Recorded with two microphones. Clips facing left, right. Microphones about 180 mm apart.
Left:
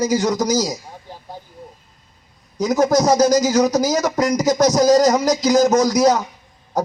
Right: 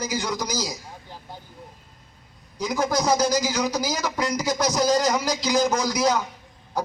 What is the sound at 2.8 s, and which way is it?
Speech, 45° left (ahead or behind).